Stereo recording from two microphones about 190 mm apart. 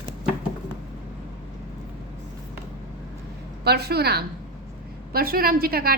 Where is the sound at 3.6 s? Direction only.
55° right (ahead or behind).